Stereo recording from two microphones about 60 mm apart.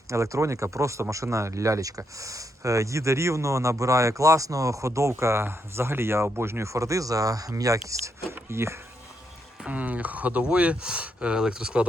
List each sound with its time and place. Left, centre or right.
0.1 s speech: right
7.5 s speech: right
8.3 s speech: right
9.6 s speech: right